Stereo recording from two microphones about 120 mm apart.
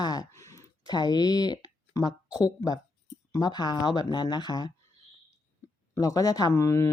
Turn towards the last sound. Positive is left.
turn(degrees=25)  # may be behind; listen again after turning